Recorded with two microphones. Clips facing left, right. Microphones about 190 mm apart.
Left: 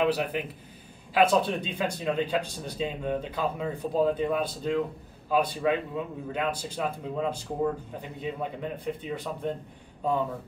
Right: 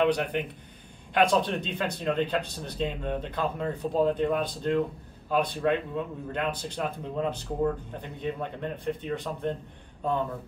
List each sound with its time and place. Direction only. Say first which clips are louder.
0.0 s speech: right 1 dB; 5° left (ahead or behind)